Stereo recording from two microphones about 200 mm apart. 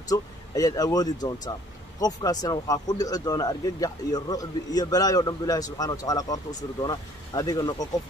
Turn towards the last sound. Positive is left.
turn(degrees=20)  # may be behind; listen again after turning